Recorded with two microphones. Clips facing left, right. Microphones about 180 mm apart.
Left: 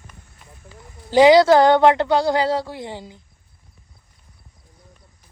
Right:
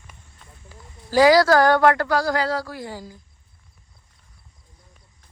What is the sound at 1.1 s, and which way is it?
Speech, 20° left (ahead or behind).